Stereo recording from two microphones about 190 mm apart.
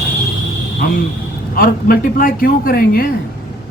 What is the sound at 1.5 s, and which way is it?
Speech, 50° left (ahead or behind).